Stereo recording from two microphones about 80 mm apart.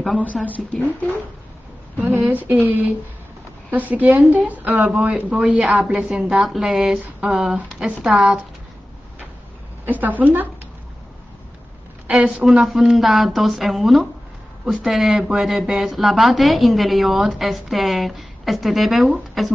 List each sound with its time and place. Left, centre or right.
0.6 s speech: centre
2.0 s a woman's voice: right; by 8.4 s centre
9.8 s speech: right
12.1 s speech: centre